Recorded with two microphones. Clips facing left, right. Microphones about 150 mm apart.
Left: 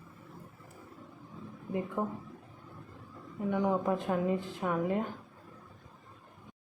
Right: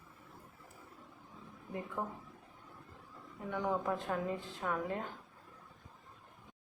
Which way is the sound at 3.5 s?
15° left (ahead or behind).